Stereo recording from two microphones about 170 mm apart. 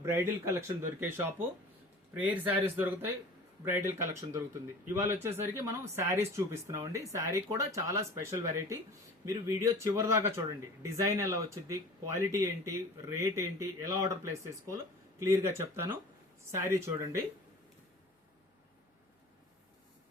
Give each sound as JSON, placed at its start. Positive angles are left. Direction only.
{"t": 0.0, "sound": "speech", "side_deg": -15}